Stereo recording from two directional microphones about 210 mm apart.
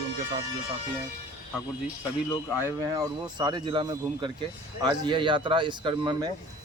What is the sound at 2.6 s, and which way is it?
Speech, 15° right (ahead or behind).